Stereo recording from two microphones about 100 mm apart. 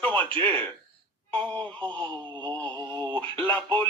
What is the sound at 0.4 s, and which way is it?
Speech, 15° left (ahead or behind).